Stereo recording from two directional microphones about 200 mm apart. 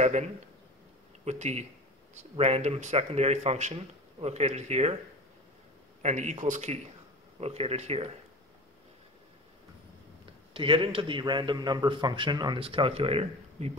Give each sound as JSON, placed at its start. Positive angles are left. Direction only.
{"t": 1.2, "sound": "speech", "side_deg": -35}
{"t": 6.0, "sound": "speech", "side_deg": -35}
{"t": 10.5, "sound": "a man's voice", "side_deg": -25}